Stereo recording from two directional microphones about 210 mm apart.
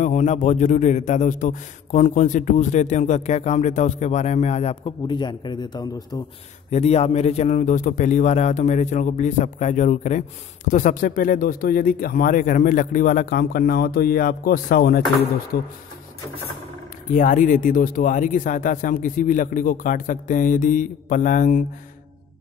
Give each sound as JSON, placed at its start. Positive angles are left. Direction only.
{"t": 0.0, "sound": "a man's voice", "side_deg": 35}
{"t": 6.7, "sound": "a man's voice", "side_deg": 30}
{"t": 17.1, "sound": "a man's voice", "side_deg": 40}